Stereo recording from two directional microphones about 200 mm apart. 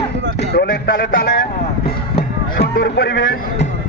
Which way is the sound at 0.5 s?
55° left (ahead or behind).